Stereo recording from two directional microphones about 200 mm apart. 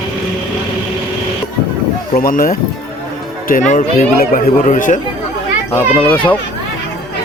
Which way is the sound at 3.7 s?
40° left (ahead or behind).